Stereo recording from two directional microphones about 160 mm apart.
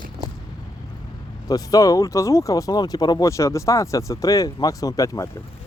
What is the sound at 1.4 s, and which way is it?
Speech, 25° left (ahead or behind).